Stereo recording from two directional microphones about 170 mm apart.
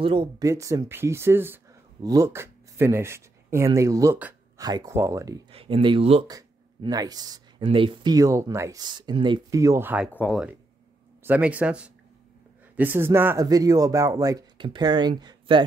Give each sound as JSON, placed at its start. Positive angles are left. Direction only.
{"t": 0.0, "sound": "speech", "side_deg": -30}
{"t": 0.4, "sound": "speech", "side_deg": -20}
{"t": 5.5, "sound": "speech", "side_deg": -35}
{"t": 6.2, "sound": "speech", "side_deg": -20}
{"t": 10.1, "sound": "speech", "side_deg": 5}
{"t": 11.2, "sound": "speech", "side_deg": -10}